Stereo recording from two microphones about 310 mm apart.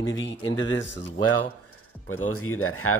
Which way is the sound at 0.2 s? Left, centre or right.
Left.